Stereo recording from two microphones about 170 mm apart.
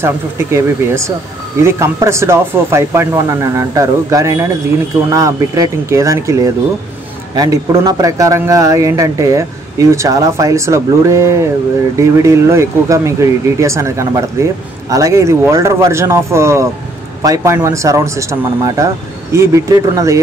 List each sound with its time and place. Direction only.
0.0 s a man's voice: 15° right (ahead or behind)